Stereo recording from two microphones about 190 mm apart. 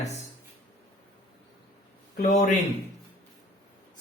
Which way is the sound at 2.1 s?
45° left (ahead or behind).